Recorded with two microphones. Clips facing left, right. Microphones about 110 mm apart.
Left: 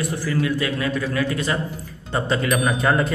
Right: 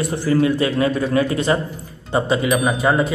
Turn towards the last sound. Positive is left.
turn(degrees=-5)  # may be behind; listen again after turning